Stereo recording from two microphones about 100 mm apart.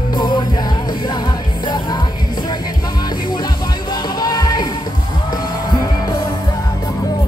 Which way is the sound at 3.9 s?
45° left (ahead or behind).